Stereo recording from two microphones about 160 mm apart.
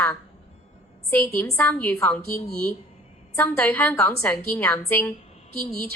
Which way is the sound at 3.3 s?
10° left (ahead or behind).